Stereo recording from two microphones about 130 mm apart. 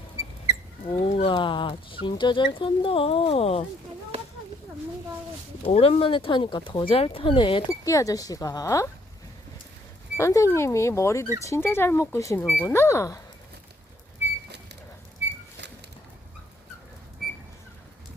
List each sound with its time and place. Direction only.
0.9 s speech: 45° left (ahead or behind)
5.6 s speech: 50° left (ahead or behind)
7.7 s speech: 25° left (ahead or behind)
10.2 s speech: 20° left (ahead or behind)